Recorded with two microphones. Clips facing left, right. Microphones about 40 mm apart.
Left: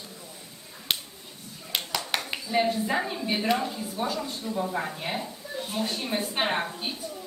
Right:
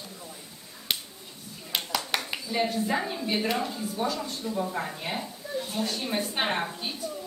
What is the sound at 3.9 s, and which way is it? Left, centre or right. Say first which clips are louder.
A woman's voice: even; centre.